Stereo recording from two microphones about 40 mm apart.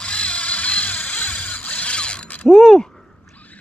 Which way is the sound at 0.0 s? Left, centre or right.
Left.